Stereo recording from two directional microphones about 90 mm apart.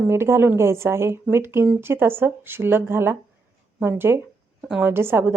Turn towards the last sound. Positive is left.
turn(degrees=-25)  # may be behind; listen again after turning